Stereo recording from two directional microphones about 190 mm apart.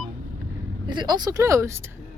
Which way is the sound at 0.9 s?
20° right (ahead or behind).